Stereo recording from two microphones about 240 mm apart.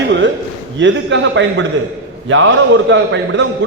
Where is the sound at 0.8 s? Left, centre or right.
Right.